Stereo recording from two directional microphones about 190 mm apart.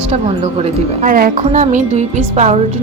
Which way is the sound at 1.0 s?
45° right (ahead or behind).